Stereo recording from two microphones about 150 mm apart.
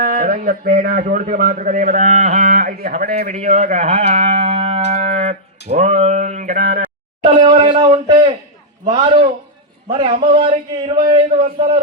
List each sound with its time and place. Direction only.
0.0 s a man's voice: 70° right (ahead or behind); by 2.4 s 55° right (ahead or behind)
2.4 s a man's voice: 70° right (ahead or behind); by 4.2 s 45° right (ahead or behind)
4.2 s music: 35° right (ahead or behind); by 6.8 s 60° right (ahead or behind)
7.3 s a man's voice: 35° right (ahead or behind)